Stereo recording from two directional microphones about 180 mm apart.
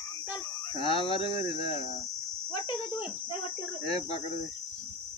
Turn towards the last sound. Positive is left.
turn(degrees=35)  # may be behind; listen again after turning